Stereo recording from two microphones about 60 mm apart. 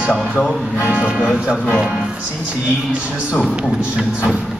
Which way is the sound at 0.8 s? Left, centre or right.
Right.